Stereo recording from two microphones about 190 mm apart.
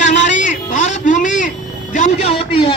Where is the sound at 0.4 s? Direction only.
40° left (ahead or behind).